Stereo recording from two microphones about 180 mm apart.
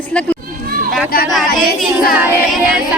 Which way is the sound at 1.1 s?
55° left (ahead or behind).